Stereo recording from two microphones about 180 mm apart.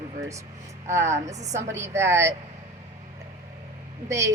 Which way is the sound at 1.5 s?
15° right (ahead or behind).